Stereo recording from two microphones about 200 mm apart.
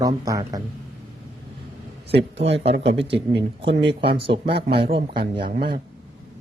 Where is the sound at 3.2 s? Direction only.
25° right (ahead or behind).